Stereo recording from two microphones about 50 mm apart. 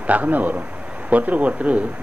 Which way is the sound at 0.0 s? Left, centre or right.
Right.